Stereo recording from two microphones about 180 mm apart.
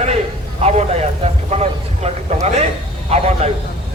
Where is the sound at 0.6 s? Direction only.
35° right (ahead or behind).